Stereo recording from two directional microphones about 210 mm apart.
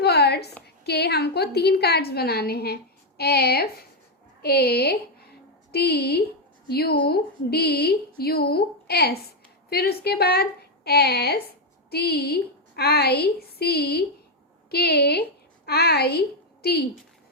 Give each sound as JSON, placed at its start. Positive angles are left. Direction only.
{"t": 0.0, "sound": "a woman's voice", "side_deg": 50}